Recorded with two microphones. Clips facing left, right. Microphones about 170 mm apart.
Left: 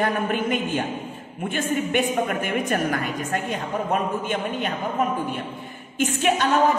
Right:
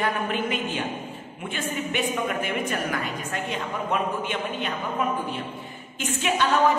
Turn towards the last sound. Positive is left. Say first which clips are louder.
# left 4 dB
turn(degrees=50)  # may be behind; listen again after turning